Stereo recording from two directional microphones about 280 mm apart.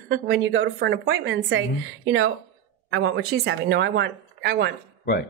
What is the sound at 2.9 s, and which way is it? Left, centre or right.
Speech, right.